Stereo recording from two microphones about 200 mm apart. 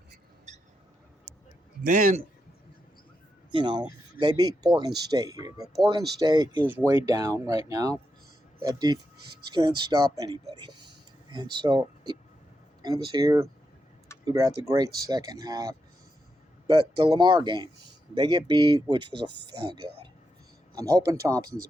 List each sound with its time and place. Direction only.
0.5 s a sound: 35° right (ahead or behind)
1.8 s a man's voice: 40° right (ahead or behind)
3.5 s speech: 25° right (ahead or behind)
17.0 s speech: 25° right (ahead or behind)
19.1 s speech: 55° right (ahead or behind)
20.7 s speech: 20° right (ahead or behind)